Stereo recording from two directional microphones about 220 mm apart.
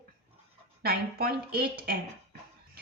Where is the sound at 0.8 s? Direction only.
45° right (ahead or behind).